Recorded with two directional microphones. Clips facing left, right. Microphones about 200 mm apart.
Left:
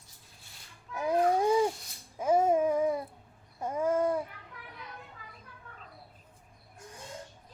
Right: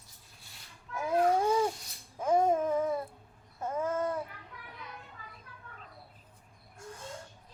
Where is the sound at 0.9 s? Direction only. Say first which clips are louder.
Left 1 dB; 15° left (ahead or behind).